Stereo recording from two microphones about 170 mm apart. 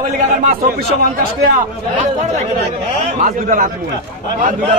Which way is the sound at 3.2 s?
50° right (ahead or behind).